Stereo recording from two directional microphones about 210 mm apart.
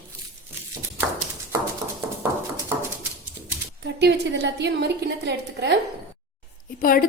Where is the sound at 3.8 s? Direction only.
55° right (ahead or behind).